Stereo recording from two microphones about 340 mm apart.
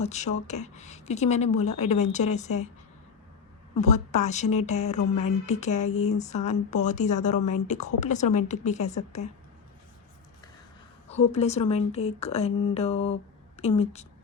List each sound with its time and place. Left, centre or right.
0.0 s speech: centre
3.8 s speech: centre
11.1 s speech: centre